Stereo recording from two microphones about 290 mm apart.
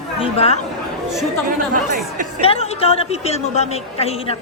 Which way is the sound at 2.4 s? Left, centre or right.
Centre.